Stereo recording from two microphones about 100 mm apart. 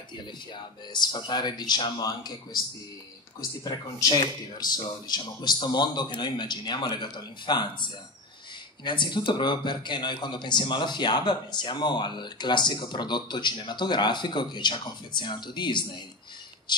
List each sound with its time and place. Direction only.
0.9 s a man's voice: 50° left (ahead or behind)
3.6 s a man's voice: 40° left (ahead or behind)